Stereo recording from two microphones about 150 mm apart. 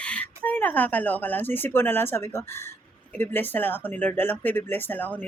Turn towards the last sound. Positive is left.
turn(degrees=10)  # may be behind; listen again after turning